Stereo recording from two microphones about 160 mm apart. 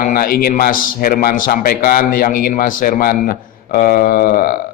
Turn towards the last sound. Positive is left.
turn(degrees=60)  # may be behind; listen again after turning